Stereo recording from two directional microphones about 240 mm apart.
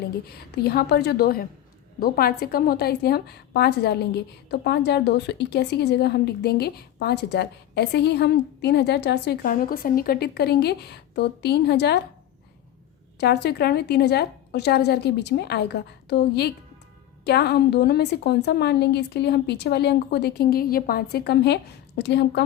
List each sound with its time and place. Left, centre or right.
0.3 s a woman's voice: left
13.1 s a woman's voice: left